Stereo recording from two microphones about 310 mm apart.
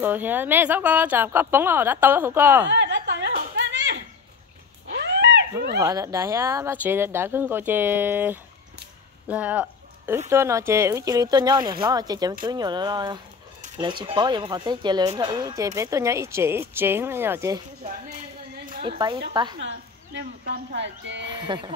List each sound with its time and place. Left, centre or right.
0.0 s speech: centre
2.7 s a sound: right
5.8 s speech: centre
18.7 s a sound: centre
19.4 s speech: centre
20.2 s speech: right
21.3 s speech: centre